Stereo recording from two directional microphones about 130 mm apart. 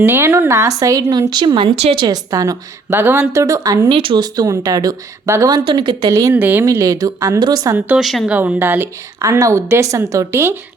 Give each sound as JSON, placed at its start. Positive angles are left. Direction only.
{"t": 0.0, "sound": "a woman's voice", "side_deg": -20}
{"t": 1.7, "sound": "a woman's voice", "side_deg": -55}
{"t": 2.0, "sound": "a woman's voice", "side_deg": -30}
{"t": 3.8, "sound": "a woman's voice", "side_deg": -40}
{"t": 6.3, "sound": "speech", "side_deg": -15}
{"t": 6.7, "sound": "a woman's voice", "side_deg": -25}
{"t": 7.9, "sound": "a woman's voice", "side_deg": -5}
{"t": 8.4, "sound": "speech", "side_deg": -15}
{"t": 9.1, "sound": "a woman's voice", "side_deg": -25}